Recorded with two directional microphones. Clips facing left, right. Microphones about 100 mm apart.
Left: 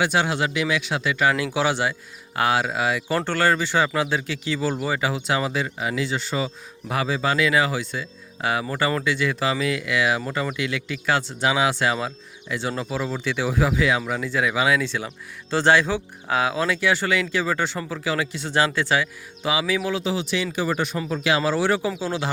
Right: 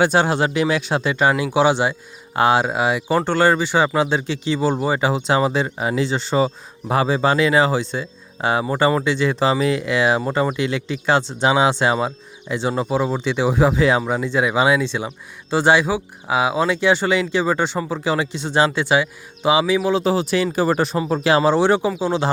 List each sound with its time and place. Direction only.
0.0 s speech: 35° right (ahead or behind)
20.0 s speech: 40° right (ahead or behind); by 22.2 s 20° right (ahead or behind)